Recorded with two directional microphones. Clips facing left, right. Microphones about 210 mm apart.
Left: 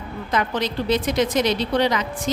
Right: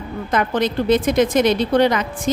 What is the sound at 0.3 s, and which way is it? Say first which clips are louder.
Speech: right 4 dB; 55° right (ahead or behind).